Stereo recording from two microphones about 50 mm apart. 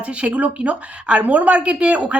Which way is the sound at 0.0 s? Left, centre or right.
Right.